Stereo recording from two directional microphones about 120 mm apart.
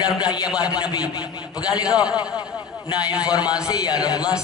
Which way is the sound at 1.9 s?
10° right (ahead or behind).